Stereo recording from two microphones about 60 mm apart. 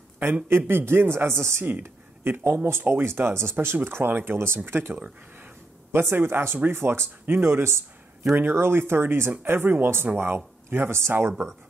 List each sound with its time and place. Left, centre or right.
0.5 s speech: right